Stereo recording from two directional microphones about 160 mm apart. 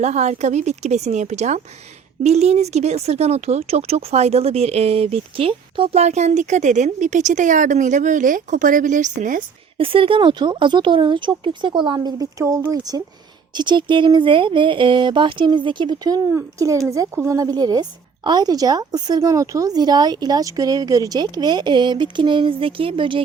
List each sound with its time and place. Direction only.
0.0 s speech: 45° right (ahead or behind)
9.7 s a woman's voice: 35° right (ahead or behind)